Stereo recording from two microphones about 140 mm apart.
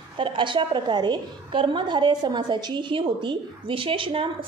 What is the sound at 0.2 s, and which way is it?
A woman's voice, 35° right (ahead or behind).